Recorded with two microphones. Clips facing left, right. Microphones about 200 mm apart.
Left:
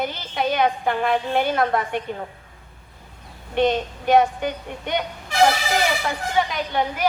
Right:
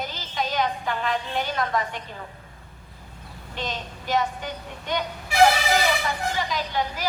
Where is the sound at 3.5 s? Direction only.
60° left (ahead or behind).